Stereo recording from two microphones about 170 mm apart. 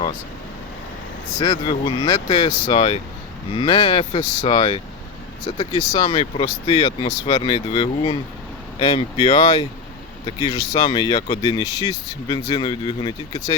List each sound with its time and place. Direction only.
1.4 s speech: 25° left (ahead or behind)